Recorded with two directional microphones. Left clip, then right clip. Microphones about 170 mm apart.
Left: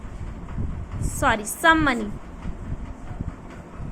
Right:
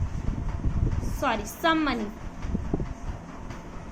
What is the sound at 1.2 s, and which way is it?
Speech, 40° left (ahead or behind).